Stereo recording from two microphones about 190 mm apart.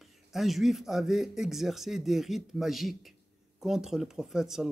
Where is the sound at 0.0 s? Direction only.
Centre (ahead or behind).